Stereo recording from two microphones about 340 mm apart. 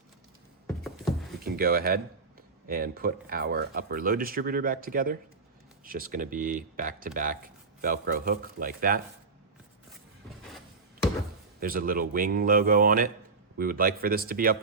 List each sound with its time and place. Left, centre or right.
1.5 s speech: right
11.6 s speech: right